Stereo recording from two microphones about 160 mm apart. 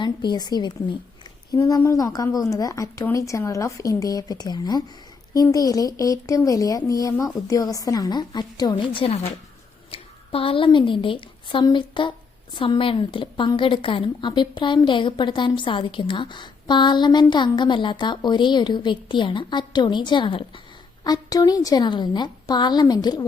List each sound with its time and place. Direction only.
0.0 s a woman's voice: 25° left (ahead or behind)